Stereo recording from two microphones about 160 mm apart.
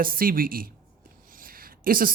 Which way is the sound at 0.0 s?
65° right (ahead or behind).